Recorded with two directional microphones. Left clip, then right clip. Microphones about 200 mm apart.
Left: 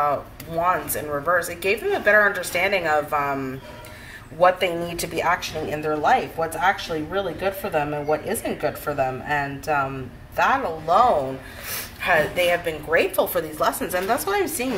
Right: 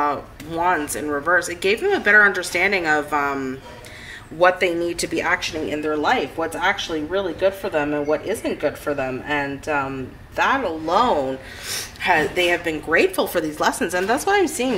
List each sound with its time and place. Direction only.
1.3 s speech: 55° right (ahead or behind)